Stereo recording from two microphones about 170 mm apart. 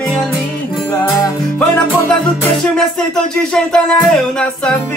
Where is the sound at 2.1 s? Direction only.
5° left (ahead or behind).